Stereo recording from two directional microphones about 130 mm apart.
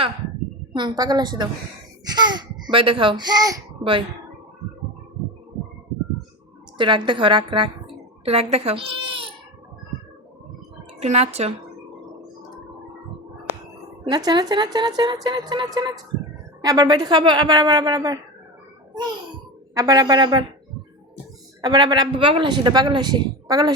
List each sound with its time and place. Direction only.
0.7 s a child's voice: 35° right (ahead or behind)
6.7 s a child's voice: 40° right (ahead or behind)
11.0 s speech: 55° right (ahead or behind)
14.0 s speech: 35° right (ahead or behind)
19.7 s speech: 30° right (ahead or behind)
21.6 s speech: 35° right (ahead or behind)